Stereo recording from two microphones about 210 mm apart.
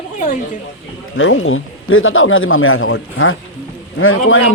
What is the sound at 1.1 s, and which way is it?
A man's voice, 70° left (ahead or behind).